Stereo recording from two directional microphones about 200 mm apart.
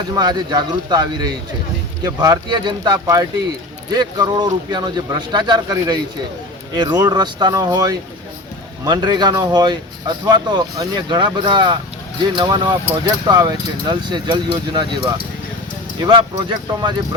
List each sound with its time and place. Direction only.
0.1 s speech: 20° right (ahead or behind)